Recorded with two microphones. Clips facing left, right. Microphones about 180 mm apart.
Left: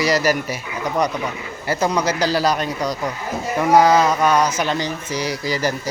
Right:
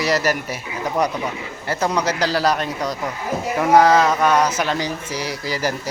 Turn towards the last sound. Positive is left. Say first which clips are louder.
# left 2 dB
turn(degrees=-5)  # may be behind; listen again after turning